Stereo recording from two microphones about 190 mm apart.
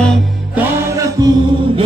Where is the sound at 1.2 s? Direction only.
20° right (ahead or behind).